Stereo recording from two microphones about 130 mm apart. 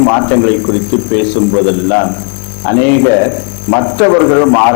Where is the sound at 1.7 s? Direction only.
20° left (ahead or behind).